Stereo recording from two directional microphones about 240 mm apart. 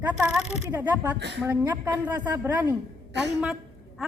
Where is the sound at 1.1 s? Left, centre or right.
Right.